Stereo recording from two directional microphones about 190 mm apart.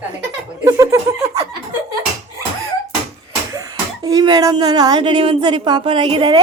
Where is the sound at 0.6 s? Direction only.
15° right (ahead or behind).